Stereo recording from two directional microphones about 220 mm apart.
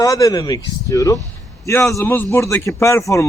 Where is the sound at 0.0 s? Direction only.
15° left (ahead or behind).